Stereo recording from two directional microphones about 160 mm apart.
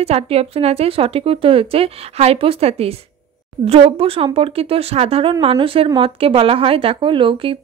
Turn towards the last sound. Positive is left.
turn(degrees=-35)  # may be behind; listen again after turning